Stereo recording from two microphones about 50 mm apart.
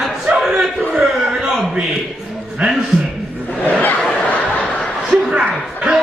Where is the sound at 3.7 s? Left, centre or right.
Left.